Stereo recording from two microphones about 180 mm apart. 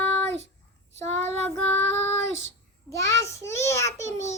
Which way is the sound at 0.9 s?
40° right (ahead or behind).